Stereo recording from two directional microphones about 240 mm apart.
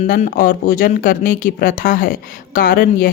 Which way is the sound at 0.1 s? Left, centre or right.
Left.